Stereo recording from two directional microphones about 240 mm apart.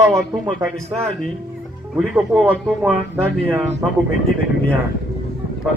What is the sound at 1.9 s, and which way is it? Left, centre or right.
Speech, centre.